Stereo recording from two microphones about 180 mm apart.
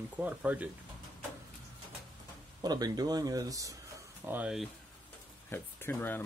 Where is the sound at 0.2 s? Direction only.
10° right (ahead or behind).